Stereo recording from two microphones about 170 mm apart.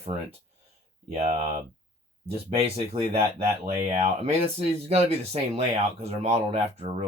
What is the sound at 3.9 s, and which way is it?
Speech, 40° right (ahead or behind).